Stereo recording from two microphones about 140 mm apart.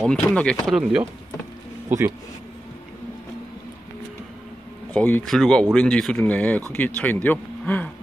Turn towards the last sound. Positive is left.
turn(degrees=10)  # may be behind; listen again after turning